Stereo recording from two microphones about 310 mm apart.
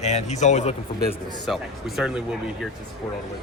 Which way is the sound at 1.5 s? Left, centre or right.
Centre.